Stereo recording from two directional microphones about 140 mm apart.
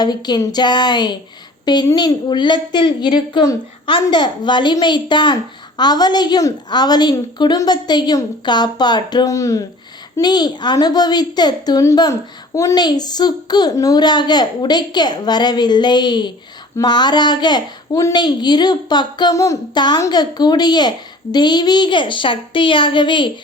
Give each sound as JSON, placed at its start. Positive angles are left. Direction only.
{"t": 0.0, "sound": "a woman's voice", "side_deg": 30}